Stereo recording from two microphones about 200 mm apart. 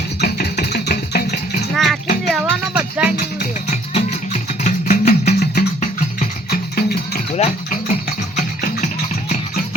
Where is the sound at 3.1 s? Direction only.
40° left (ahead or behind).